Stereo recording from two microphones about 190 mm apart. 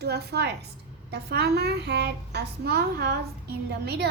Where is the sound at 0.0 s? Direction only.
60° right (ahead or behind).